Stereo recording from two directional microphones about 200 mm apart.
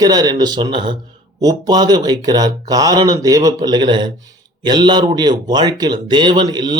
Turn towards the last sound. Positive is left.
turn(degrees=-20)  # may be behind; listen again after turning